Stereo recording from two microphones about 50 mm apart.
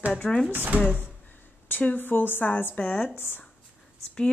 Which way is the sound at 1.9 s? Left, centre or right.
Left.